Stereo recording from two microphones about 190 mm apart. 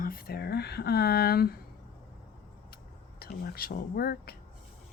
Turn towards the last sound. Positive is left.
turn(degrees=55)  # may be behind; listen again after turning